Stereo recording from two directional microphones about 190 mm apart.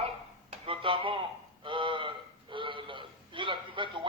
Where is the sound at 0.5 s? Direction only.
30° right (ahead or behind).